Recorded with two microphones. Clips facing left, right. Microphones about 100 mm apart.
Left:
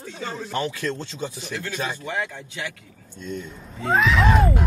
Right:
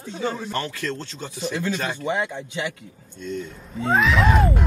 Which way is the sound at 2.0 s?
20° right (ahead or behind).